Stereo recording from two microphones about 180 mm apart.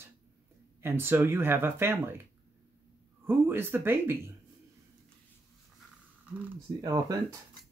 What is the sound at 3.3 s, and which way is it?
Speech, 10° right (ahead or behind).